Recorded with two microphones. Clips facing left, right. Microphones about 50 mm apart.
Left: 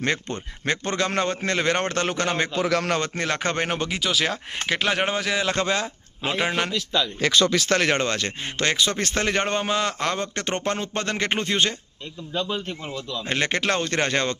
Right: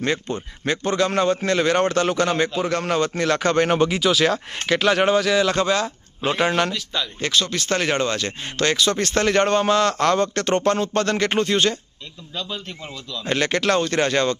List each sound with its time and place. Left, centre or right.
0.0 s a man's voice: left
3.7 s speech: centre
4.5 s speech: centre
6.2 s a man's voice: centre
7.7 s a man's voice: left
8.5 s speech: left
9.2 s a man's voice: centre
10.3 s speech: left